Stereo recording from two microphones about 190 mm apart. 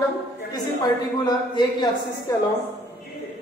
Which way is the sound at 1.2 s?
20° left (ahead or behind).